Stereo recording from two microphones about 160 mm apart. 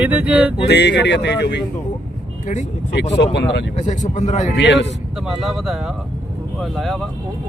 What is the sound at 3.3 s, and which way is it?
Speech, 90° left.